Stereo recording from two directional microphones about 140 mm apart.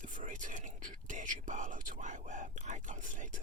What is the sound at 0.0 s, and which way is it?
Whispering, 65° right (ahead or behind).